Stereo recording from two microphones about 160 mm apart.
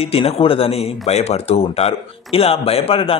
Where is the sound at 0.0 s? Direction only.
40° left (ahead or behind).